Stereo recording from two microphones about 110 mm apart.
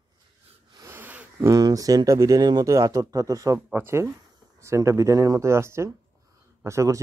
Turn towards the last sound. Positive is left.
turn(degrees=-30)  # may be behind; listen again after turning